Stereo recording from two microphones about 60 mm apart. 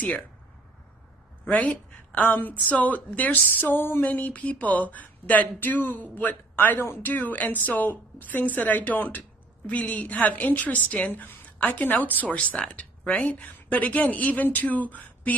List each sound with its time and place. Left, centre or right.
1.4 s a woman's voice: left